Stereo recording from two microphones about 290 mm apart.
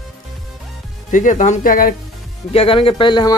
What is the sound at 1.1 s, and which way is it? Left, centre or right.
A man's voice, left.